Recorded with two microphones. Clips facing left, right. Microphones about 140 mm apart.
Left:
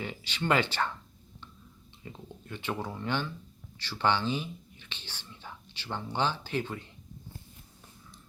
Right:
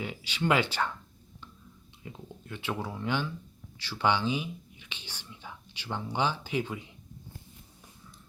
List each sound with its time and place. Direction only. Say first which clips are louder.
0.0 s speech: right 3 dB; 10° right (ahead or behind)
2.0 s speech: even; 5° right (ahead or behind)